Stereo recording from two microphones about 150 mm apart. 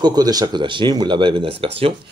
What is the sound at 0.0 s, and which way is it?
Speech, 25° right (ahead or behind).